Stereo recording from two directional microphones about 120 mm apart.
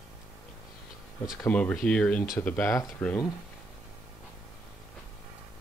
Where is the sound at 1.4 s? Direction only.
10° left (ahead or behind).